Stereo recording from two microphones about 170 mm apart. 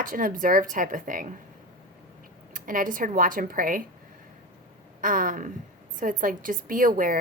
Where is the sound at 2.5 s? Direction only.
50° right (ahead or behind).